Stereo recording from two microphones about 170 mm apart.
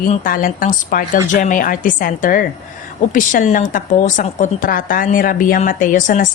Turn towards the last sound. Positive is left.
turn(degrees=50)  # may be behind; listen again after turning